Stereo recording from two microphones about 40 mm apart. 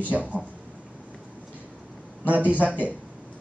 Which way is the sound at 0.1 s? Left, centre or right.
Right.